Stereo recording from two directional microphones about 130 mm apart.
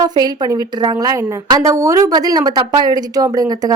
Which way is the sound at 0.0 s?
30° right (ahead or behind).